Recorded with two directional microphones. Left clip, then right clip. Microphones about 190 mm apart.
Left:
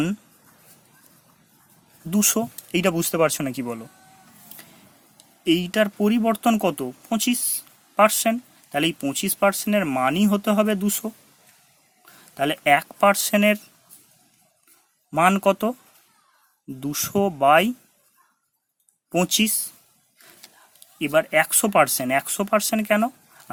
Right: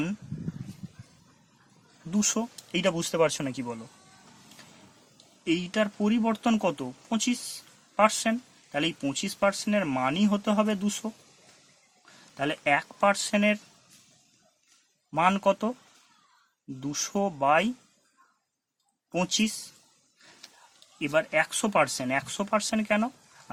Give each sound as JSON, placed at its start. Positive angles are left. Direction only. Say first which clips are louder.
{"t": 2.0, "sound": "speech", "louder": "left 6 dB", "side_deg": 45}
{"t": 2.6, "sound": "speech", "louder": "left 5 dB", "side_deg": 30}
{"t": 5.5, "sound": "speech", "louder": "left 7 dB", "side_deg": 35}
{"t": 12.4, "sound": "speech", "louder": "left 7 dB", "side_deg": 40}
{"t": 15.1, "sound": "speech", "louder": "left 5 dB", "side_deg": 35}
{"t": 16.8, "sound": "speech", "louder": "left 6 dB", "side_deg": 40}
{"t": 19.1, "sound": "speech", "louder": "left 6 dB", "side_deg": 35}
{"t": 20.4, "sound": "a sound", "louder": "even", "side_deg": 25}
{"t": 21.0, "sound": "speech", "louder": "left 6 dB", "side_deg": 40}